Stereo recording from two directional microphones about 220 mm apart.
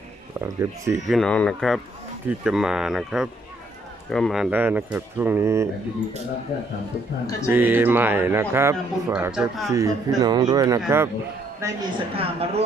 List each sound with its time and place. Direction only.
0.4 s a man's voice: 15° right (ahead or behind)
1.0 s a man's voice: centre (ahead or behind)
7.4 s a man's voice: 10° right (ahead or behind); by 12.6 s 25° right (ahead or behind)